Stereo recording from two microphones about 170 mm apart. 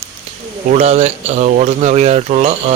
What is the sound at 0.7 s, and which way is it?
Speech, 40° right (ahead or behind).